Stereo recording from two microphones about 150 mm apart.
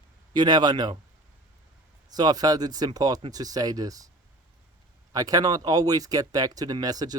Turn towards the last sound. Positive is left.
turn(degrees=-25)  # may be behind; listen again after turning